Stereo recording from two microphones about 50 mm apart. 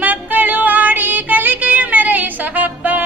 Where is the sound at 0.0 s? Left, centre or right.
Right.